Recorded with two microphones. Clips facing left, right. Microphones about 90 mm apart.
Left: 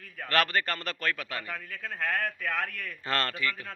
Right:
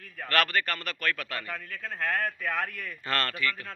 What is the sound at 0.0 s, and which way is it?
Speech, centre (ahead or behind).